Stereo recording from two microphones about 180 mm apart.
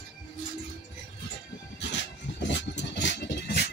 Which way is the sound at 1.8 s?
80° left.